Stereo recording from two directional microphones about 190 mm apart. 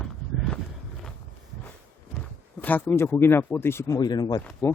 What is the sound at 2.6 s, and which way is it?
Speech, 10° left (ahead or behind).